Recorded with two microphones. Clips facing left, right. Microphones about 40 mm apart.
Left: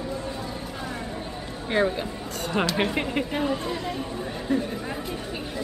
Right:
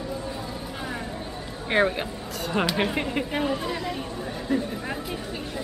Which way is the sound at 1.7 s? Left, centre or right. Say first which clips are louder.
Right 1 dB; right.